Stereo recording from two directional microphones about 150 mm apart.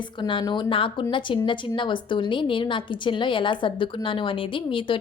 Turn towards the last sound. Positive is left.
turn(degrees=35)  # may be behind; listen again after turning